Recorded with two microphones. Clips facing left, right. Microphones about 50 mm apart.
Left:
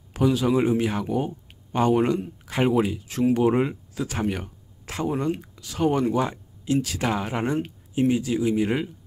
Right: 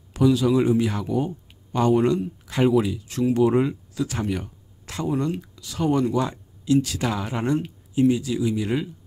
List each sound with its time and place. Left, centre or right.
0.1 s speech: left
3.3 s speech: centre